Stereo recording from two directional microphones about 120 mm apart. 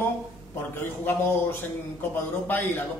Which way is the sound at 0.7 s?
15° left (ahead or behind).